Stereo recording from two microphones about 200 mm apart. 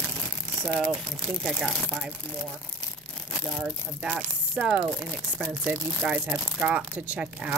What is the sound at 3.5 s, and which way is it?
Speech, 5° right (ahead or behind).